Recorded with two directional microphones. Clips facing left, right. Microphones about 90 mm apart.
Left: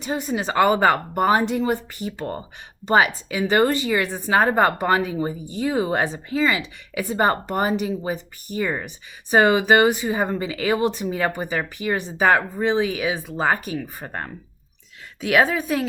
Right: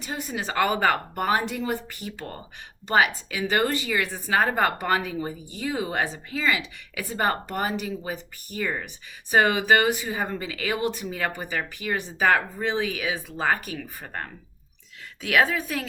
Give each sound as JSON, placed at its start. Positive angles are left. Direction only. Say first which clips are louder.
{"t": 0.0, "sound": "speech", "louder": "left 6 dB", "side_deg": 25}